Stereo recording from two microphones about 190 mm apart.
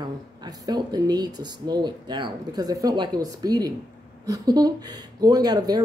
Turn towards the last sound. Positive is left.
turn(degrees=-20)  # may be behind; listen again after turning